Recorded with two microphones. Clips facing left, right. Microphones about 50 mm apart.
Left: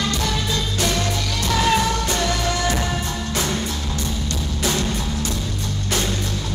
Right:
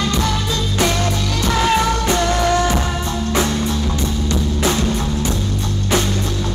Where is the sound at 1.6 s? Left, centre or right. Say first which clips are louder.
Right 3 dB; right.